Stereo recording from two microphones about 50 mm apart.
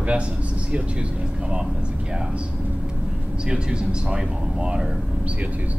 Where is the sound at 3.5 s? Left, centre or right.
Centre.